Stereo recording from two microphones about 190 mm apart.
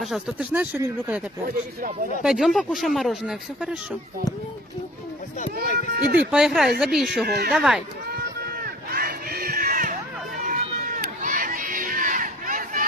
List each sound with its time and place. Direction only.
0.0 s speech: 5° right (ahead or behind)
2.2 s speech: centre (ahead or behind)
5.7 s speech: 55° right (ahead or behind)
6.3 s speech: 5° right (ahead or behind)
7.3 s speech: 55° right (ahead or behind)
7.5 s speech: 5° right (ahead or behind)
8.5 s crowd: 50° right (ahead or behind)